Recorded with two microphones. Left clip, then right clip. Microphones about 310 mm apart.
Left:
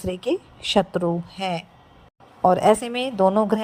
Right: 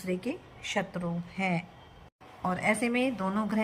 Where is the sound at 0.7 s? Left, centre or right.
Left.